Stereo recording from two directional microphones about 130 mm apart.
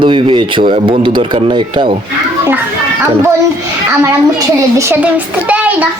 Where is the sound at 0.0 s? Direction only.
40° right (ahead or behind).